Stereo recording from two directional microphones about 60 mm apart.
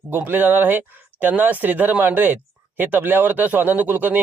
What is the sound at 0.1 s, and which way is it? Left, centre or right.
Speech, right.